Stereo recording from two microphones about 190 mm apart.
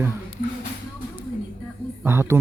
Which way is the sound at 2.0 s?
10° right (ahead or behind).